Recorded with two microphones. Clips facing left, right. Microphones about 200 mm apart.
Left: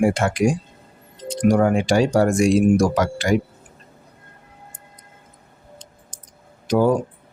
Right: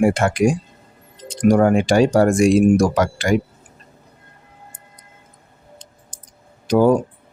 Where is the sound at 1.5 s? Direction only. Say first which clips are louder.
Right 4 dB; 50° right (ahead or behind).